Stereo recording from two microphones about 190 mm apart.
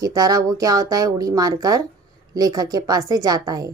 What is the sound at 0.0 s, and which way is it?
A woman's voice, 20° right (ahead or behind).